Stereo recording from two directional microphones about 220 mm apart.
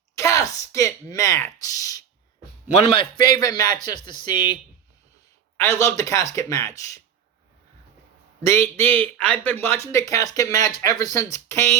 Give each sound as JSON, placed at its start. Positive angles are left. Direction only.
{"t": 0.2, "sound": "a woman's voice", "side_deg": 15}
{"t": 2.6, "sound": "a man's voice", "side_deg": 25}
{"t": 5.6, "sound": "speech", "side_deg": 10}
{"t": 8.4, "sound": "speech", "side_deg": 10}